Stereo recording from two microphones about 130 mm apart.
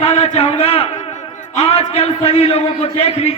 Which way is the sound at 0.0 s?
50° left (ahead or behind).